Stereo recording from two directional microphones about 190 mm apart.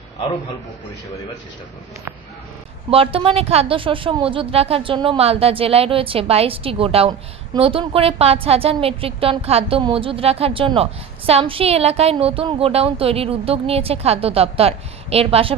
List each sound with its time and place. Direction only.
2.9 s a woman's voice: 30° right (ahead or behind)